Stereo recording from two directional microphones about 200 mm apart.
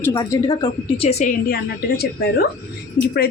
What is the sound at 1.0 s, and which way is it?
A woman's voice, 40° left (ahead or behind).